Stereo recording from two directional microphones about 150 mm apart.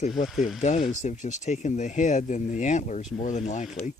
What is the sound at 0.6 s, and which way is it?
Speech, 50° left (ahead or behind).